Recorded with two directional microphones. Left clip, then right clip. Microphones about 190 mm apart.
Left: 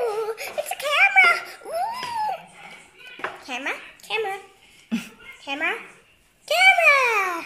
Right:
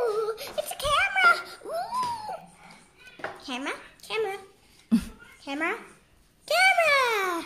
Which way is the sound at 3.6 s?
55° right (ahead or behind).